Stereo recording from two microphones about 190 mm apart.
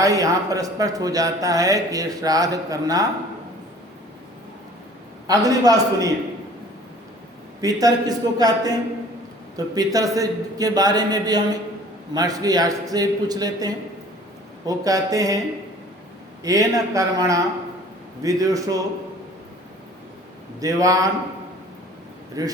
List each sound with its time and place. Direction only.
0.0 s a man's voice: 20° right (ahead or behind)
5.3 s a man's voice: 20° right (ahead or behind)
7.6 s a man's voice: 20° right (ahead or behind)
16.4 s a man's voice: 20° right (ahead or behind)
20.6 s a man's voice: 20° right (ahead or behind)
22.4 s speech: 20° right (ahead or behind)